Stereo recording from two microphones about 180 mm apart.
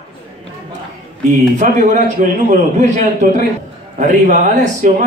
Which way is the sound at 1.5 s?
45° right (ahead or behind).